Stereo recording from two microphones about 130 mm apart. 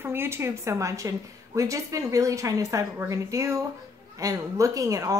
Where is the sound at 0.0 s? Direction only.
20° right (ahead or behind).